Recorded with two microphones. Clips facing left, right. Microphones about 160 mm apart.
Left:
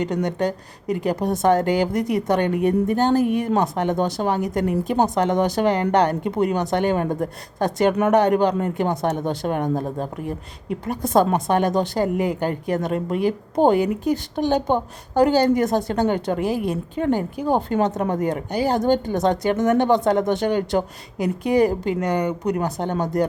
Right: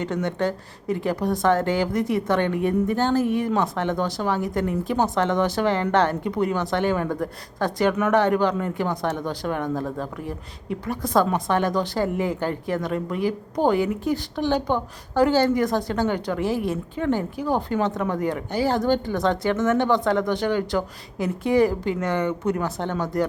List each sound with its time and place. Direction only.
0.0 s speech: 15° left (ahead or behind)